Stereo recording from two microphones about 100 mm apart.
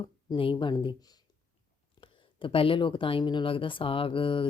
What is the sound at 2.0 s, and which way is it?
Speech, 60° left (ahead or behind).